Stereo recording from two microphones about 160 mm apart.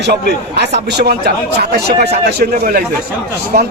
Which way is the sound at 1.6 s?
90° right.